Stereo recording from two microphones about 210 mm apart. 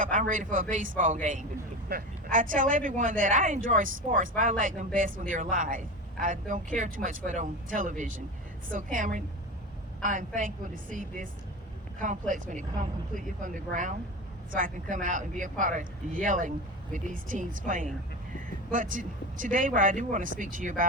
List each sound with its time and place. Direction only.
0.0 s speech: 40° right (ahead or behind)
12.3 s speech: 40° right (ahead or behind)